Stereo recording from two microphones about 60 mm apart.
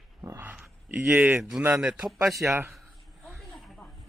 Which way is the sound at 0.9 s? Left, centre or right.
Centre.